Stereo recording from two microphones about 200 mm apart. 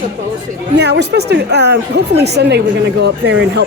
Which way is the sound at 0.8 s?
55° right (ahead or behind).